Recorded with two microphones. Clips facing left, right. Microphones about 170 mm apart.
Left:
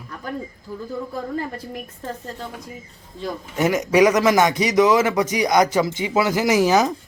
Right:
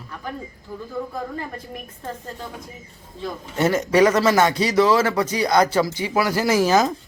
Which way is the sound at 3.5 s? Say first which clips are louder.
Even; 15° left (ahead or behind).